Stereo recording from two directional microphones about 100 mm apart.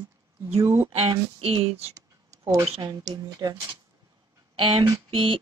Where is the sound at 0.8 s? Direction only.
70° right (ahead or behind).